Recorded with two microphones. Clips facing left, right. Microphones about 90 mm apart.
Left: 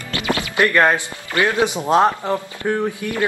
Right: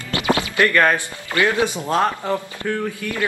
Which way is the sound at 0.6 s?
20° left (ahead or behind).